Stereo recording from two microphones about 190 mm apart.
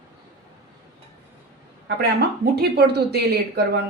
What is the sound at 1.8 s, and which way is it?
Speech, 55° right (ahead or behind).